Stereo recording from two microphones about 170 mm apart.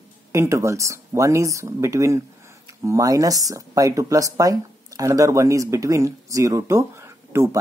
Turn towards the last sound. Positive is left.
turn(degrees=-15)  # may be behind; listen again after turning